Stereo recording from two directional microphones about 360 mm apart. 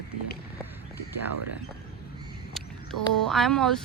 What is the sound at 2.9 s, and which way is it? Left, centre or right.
Speech, right.